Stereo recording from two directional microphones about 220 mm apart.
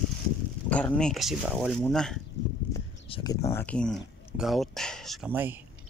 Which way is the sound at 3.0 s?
20° left (ahead or behind).